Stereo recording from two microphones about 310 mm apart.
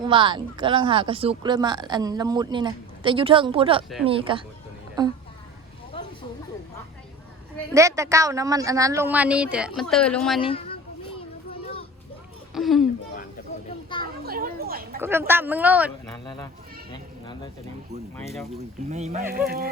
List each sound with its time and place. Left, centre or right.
0.1 s speech: centre
7.7 s speech: centre
10.4 s children playing: centre
12.5 s a sound: centre
14.0 s children playing: right
15.3 s speech: centre
16.1 s speech: centre
16.9 s a sound: centre
18.2 s speech: centre
18.5 s speech: right